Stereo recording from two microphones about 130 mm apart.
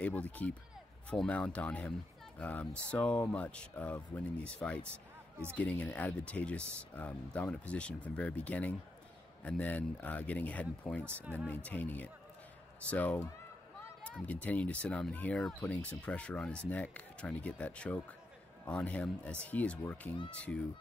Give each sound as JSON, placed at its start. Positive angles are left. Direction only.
{"t": 0.0, "sound": "speech", "side_deg": 10}
{"t": 11.1, "sound": "speech", "side_deg": -15}
{"t": 11.3, "sound": "speech", "side_deg": 10}